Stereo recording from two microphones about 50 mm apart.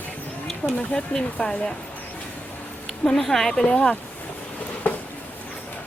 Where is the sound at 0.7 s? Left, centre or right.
Centre.